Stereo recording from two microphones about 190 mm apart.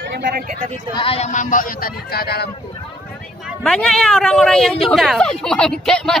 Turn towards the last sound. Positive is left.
turn(degrees=0)  # may be behind; listen again after turning